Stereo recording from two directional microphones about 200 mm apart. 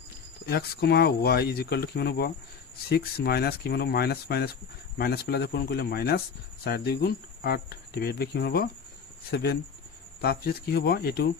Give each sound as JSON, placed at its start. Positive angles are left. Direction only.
{"t": 0.4, "sound": "speech", "side_deg": 55}